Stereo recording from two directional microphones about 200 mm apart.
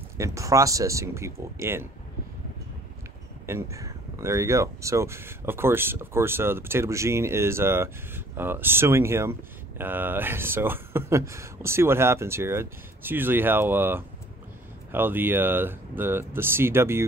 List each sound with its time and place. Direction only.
0.2 s speech: 15° right (ahead or behind)
3.4 s speech: 15° right (ahead or behind)